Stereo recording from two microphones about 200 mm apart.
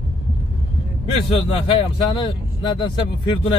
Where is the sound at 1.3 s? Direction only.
25° left (ahead or behind).